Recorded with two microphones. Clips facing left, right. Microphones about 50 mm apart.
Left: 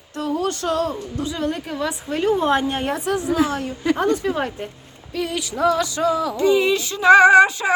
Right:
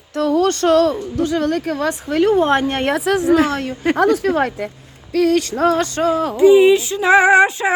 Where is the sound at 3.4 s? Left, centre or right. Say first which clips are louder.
Right 3 dB; right.